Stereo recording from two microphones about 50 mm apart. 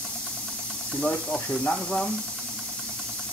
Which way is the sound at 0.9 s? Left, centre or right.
Centre.